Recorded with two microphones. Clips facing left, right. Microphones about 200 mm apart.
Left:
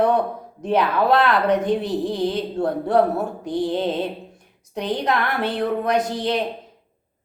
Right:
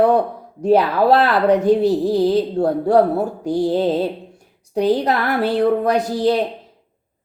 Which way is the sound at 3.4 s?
40° right (ahead or behind).